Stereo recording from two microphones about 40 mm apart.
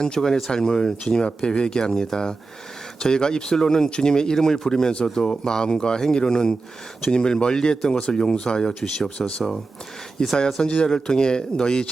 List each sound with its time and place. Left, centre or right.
0.0 s speech: centre
10.3 s speech: left